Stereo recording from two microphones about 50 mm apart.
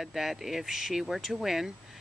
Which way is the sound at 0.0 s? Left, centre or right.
Centre.